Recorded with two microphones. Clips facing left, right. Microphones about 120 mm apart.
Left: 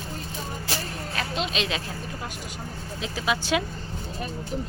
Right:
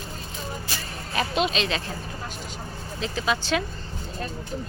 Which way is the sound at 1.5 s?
10° left (ahead or behind).